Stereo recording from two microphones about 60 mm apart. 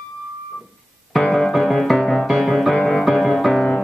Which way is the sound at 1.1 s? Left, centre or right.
Centre.